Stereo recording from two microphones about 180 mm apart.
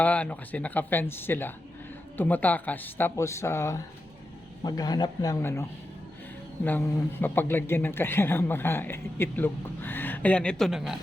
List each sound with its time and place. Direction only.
0.0 s a man's voice: 10° left (ahead or behind)
6.7 s a man's voice: 10° left (ahead or behind)